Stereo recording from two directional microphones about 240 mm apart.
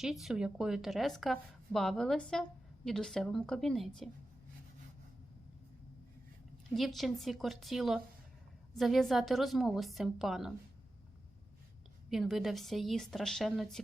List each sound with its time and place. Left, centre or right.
0.0 s a woman's voice: centre
6.7 s a woman's voice: centre
12.1 s a woman's voice: centre